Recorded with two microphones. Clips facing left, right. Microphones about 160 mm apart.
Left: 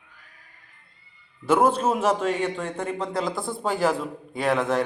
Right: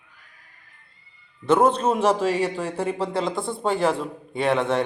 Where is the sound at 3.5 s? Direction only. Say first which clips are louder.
Right 1 dB; centre (ahead or behind).